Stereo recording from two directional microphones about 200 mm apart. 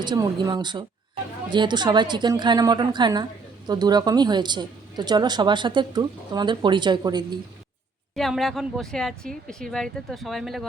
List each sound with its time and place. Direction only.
0.0 s speech: 20° right (ahead or behind)
8.1 s speech: centre (ahead or behind)